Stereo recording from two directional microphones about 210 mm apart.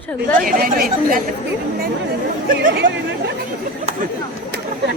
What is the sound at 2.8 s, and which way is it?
Chatter, 60° right (ahead or behind).